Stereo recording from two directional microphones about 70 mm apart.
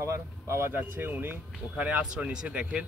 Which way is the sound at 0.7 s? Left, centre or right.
Right.